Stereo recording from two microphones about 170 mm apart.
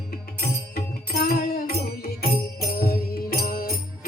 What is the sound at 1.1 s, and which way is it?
Music, 65° left (ahead or behind).